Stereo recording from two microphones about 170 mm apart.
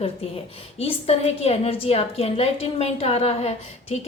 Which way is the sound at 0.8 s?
35° left (ahead or behind).